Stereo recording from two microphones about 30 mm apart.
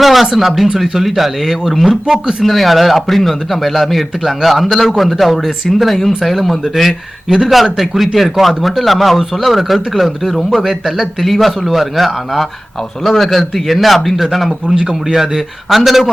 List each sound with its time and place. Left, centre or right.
0.0 s a sound: centre
0.3 s speech: centre
2.4 s speech: centre
11.2 s speech: centre
14.8 s a man's voice: right
15.7 s speech: centre